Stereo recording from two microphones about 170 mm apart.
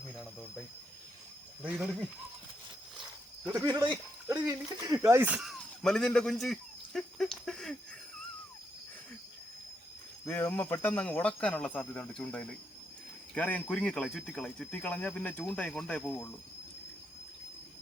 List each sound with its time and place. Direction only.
1.6 s speech: 5° right (ahead or behind)
3.0 s goat: centre (ahead or behind)
3.7 s speech: 20° right (ahead or behind); by 7.8 s 5° left (ahead or behind)
10.2 s speech: 10° left (ahead or behind)